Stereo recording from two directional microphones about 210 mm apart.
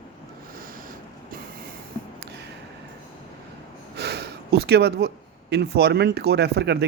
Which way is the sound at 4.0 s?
50° right (ahead or behind).